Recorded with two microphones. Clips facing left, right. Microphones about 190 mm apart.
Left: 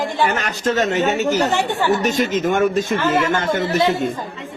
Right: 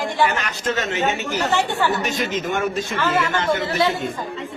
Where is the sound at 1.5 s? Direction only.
15° left (ahead or behind).